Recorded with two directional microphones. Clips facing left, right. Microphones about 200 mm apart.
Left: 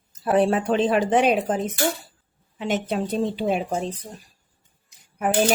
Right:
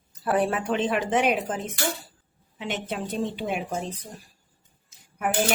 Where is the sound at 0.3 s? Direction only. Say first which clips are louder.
Left 5 dB; 25° left (ahead or behind).